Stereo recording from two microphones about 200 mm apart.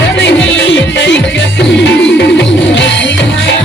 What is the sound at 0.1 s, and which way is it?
Music, 60° left (ahead or behind).